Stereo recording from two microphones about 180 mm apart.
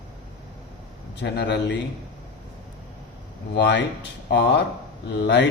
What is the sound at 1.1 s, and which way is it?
Speech, 70° left (ahead or behind).